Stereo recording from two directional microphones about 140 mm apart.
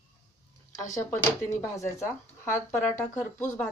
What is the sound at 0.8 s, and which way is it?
Speech, 20° left (ahead or behind).